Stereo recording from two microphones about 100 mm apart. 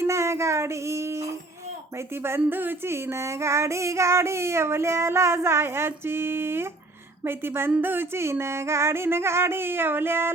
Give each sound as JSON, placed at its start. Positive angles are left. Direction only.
{"t": 0.0, "sound": "child singing", "side_deg": -30}